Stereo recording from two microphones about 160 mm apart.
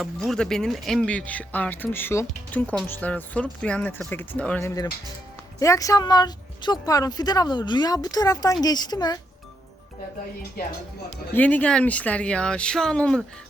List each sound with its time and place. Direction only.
0.0 s speech: centre (ahead or behind)
5.5 s speech: 20° left (ahead or behind)
10.6 s speech: 65° left (ahead or behind)
11.3 s speech: 10° left (ahead or behind)